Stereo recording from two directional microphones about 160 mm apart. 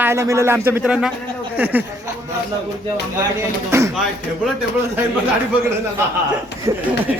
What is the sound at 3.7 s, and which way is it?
Speech, 15° right (ahead or behind).